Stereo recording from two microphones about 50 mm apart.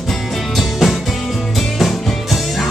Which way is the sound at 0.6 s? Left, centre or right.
Centre.